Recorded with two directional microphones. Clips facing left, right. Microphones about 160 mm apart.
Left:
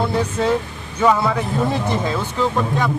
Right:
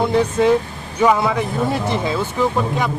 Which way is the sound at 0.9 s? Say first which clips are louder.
Right 1 dB; 10° right (ahead or behind).